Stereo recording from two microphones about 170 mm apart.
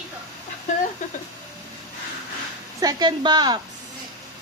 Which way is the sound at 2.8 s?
25° right (ahead or behind).